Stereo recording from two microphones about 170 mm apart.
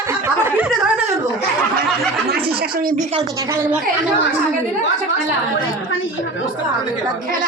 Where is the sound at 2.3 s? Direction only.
65° right (ahead or behind).